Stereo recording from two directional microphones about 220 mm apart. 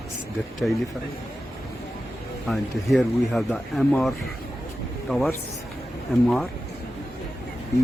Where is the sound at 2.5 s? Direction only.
Centre (ahead or behind).